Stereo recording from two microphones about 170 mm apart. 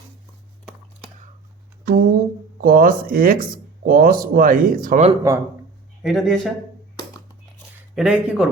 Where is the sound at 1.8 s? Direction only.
60° right (ahead or behind).